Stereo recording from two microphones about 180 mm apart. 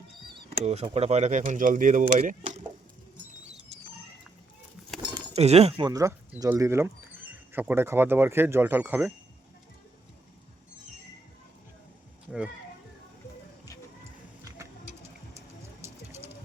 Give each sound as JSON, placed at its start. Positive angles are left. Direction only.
{"t": 0.6, "sound": "speech", "side_deg": -35}
{"t": 5.3, "sound": "speech", "side_deg": -35}
{"t": 5.9, "sound": "speech", "side_deg": -15}
{"t": 14.4, "sound": "a sound", "side_deg": -15}